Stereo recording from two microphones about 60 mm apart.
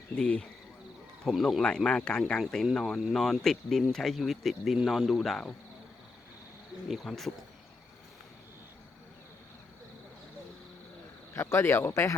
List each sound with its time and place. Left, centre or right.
0.2 s speech: centre
1.2 s speech: centre
1.6 s speech: centre
6.8 s speech: centre
11.3 s speech: left